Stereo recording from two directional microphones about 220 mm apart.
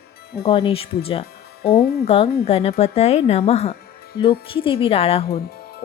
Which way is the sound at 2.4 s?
25° left (ahead or behind).